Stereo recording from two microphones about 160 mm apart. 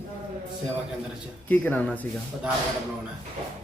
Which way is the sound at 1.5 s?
10° left (ahead or behind).